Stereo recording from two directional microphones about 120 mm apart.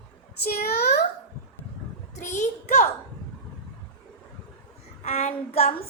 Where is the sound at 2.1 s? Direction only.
80° left.